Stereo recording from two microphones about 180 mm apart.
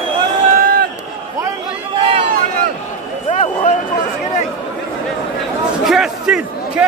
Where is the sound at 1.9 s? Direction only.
30° right (ahead or behind).